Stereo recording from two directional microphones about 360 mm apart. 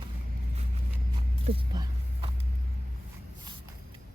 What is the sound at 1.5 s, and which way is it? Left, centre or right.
Speech, centre.